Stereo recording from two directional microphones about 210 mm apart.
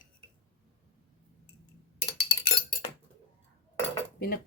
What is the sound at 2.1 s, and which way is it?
Chink, 50° left (ahead or behind).